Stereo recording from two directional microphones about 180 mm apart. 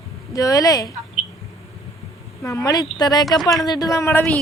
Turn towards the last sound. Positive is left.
turn(degrees=10)  # may be behind; listen again after turning